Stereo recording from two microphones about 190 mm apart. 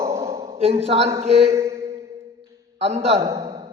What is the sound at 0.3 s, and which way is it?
A man's voice, 30° right (ahead or behind).